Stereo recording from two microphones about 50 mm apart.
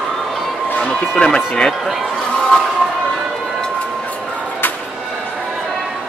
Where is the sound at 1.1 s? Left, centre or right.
Centre.